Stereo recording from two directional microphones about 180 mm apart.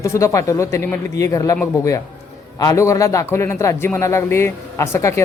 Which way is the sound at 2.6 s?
20° left (ahead or behind).